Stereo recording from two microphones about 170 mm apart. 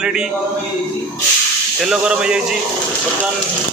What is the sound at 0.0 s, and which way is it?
Speech, 5° right (ahead or behind).